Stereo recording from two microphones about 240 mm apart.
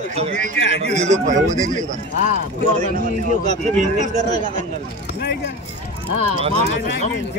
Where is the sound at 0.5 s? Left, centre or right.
Left.